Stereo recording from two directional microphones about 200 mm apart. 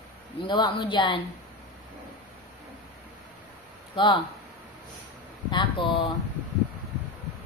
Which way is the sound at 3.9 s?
25° left (ahead or behind).